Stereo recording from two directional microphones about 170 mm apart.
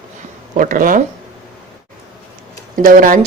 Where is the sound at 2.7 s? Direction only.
55° right (ahead or behind).